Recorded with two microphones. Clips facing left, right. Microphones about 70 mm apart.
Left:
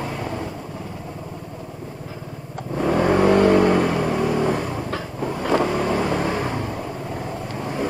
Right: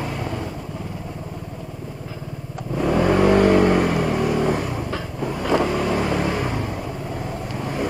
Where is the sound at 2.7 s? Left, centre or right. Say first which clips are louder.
Even; left.